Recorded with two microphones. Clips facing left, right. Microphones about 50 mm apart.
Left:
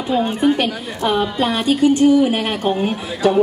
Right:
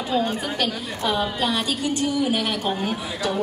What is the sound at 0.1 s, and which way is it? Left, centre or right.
Speech, left.